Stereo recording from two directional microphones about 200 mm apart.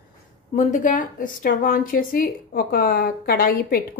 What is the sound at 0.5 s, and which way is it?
A woman's voice, 40° left (ahead or behind).